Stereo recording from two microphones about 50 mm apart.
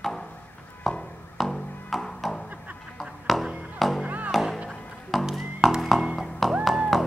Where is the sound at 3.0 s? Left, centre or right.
Centre.